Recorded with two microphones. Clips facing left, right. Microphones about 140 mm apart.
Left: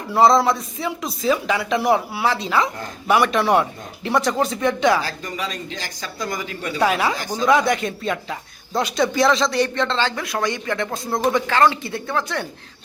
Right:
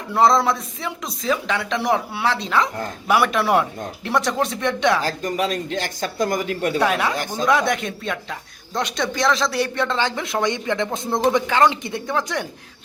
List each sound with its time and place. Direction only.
0.1 s speech: centre (ahead or behind)
5.0 s speech: 45° right (ahead or behind)
6.7 s speech: centre (ahead or behind); by 12.5 s 15° right (ahead or behind)